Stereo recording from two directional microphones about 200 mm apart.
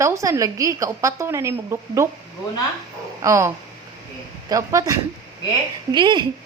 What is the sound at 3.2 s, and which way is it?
Speech, 15° right (ahead or behind).